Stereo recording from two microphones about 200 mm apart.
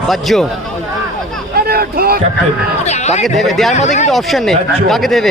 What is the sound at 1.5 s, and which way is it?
Speech, 50° right (ahead or behind).